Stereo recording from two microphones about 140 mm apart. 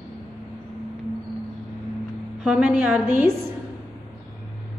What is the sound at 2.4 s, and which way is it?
Speech, 10° right (ahead or behind).